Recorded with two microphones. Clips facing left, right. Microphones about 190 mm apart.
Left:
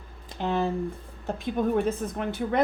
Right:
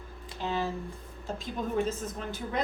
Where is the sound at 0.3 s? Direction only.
55° left (ahead or behind).